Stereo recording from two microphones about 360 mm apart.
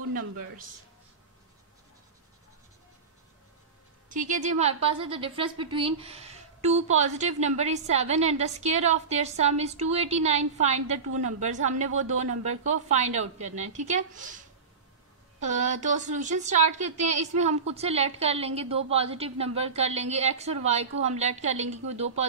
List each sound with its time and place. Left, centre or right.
4.1 s a woman's voice: right
15.4 s a woman's voice: centre